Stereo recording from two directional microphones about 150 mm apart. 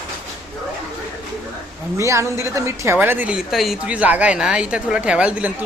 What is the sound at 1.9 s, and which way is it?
Speech, 20° right (ahead or behind).